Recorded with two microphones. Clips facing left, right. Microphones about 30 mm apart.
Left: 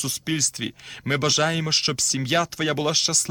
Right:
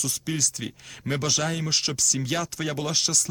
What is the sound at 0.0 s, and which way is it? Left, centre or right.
Speech, left.